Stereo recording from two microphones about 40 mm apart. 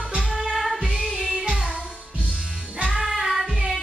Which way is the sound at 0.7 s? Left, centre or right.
Centre.